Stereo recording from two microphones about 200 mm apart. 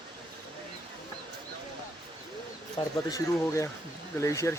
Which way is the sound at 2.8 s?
25° left (ahead or behind).